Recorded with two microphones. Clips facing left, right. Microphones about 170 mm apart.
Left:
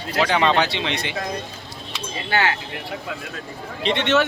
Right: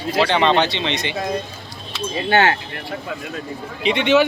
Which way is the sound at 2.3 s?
30° right (ahead or behind).